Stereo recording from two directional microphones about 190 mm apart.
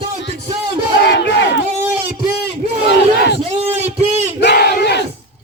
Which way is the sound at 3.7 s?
35° right (ahead or behind).